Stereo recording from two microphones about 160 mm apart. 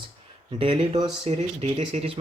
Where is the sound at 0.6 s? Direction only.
30° right (ahead or behind).